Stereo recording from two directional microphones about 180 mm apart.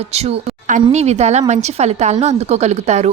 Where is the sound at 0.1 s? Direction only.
35° right (ahead or behind).